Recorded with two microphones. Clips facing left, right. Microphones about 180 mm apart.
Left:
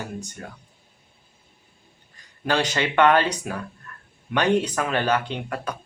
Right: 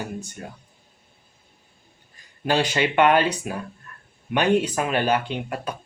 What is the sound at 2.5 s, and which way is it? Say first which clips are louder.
Speech: right 2 dB; 15° right (ahead or behind).